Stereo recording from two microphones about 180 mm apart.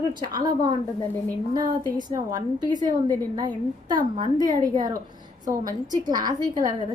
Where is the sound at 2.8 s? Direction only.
25° right (ahead or behind).